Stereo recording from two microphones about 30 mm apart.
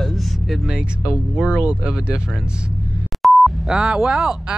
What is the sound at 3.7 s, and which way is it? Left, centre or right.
Speech, right.